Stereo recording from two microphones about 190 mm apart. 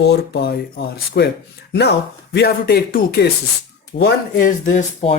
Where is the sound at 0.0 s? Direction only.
60° left (ahead or behind).